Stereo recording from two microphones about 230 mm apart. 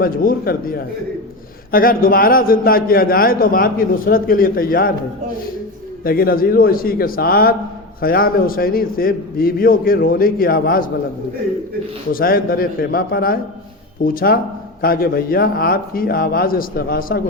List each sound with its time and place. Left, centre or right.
0.0 s a man's voice: left
6.1 s a man's voice: left
12.1 s a man's voice: left